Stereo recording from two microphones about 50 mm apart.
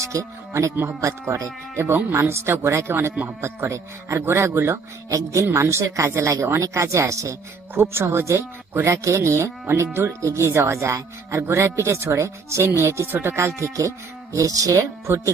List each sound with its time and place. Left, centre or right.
0.0 s speech: right
1.3 s speech: right
3.2 s speech: right
5.0 s speech: right
5.5 s speech: right
7.8 s speech: right
10.1 s speech: right
12.0 s speech: right
13.2 s speech: right